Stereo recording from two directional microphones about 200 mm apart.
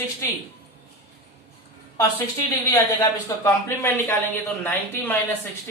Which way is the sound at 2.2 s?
15° left (ahead or behind).